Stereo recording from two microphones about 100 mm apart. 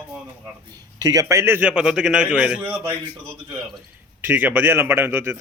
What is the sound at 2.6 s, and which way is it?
Speech, 20° right (ahead or behind).